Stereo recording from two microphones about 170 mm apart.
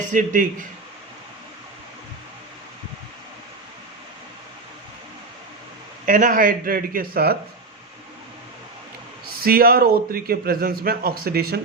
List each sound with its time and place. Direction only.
0.1 s a man's voice: 50° right (ahead or behind)
6.1 s a man's voice: 50° right (ahead or behind)
9.2 s a man's voice: 60° right (ahead or behind)